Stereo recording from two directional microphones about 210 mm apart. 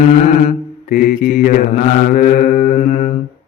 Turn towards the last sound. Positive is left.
turn(degrees=35)  # may be behind; listen again after turning